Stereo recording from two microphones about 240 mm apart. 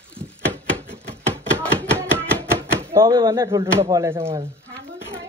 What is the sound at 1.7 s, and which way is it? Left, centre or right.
Chopping, centre.